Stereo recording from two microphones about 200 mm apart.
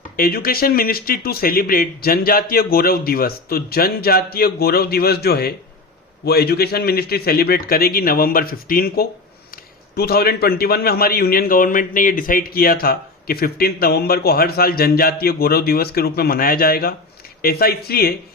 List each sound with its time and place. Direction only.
0.2 s a man's voice: 50° left (ahead or behind)